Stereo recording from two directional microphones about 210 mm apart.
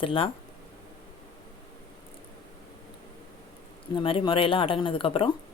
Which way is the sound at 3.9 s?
25° left (ahead or behind).